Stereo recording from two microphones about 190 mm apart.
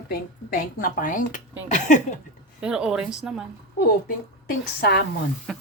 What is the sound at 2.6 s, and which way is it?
Speech, 5° right (ahead or behind).